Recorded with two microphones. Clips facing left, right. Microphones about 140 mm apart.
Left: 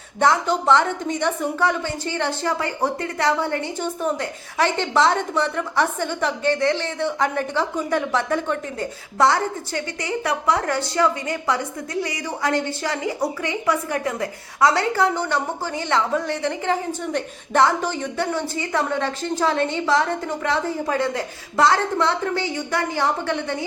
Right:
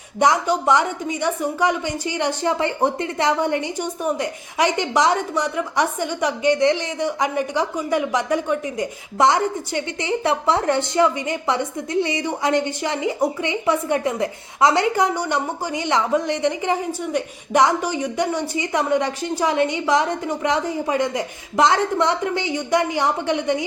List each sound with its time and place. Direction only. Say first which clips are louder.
0.2 s a woman's voice: right 1 dB; 15° right (ahead or behind)